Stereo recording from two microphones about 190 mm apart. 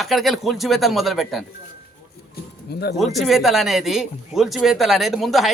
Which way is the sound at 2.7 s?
60° left (ahead or behind).